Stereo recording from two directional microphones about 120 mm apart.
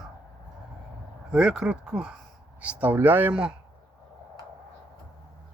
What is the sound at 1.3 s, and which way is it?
Speech, 5° right (ahead or behind).